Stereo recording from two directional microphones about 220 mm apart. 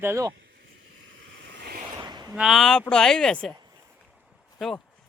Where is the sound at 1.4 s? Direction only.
55° right (ahead or behind).